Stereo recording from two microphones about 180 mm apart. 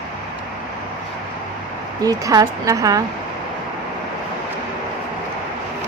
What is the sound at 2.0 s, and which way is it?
Speech, 20° right (ahead or behind).